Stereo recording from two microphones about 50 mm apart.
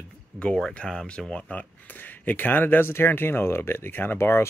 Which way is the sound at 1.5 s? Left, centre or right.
Left.